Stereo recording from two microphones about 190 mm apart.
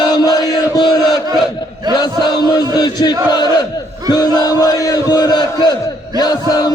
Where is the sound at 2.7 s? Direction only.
20° left (ahead or behind).